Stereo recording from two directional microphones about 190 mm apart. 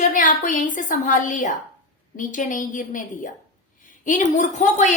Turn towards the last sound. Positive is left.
turn(degrees=40)  # may be behind; listen again after turning